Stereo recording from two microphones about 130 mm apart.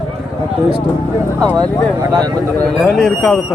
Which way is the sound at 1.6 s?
30° right (ahead or behind).